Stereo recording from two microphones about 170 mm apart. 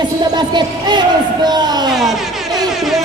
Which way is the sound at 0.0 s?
25° right (ahead or behind).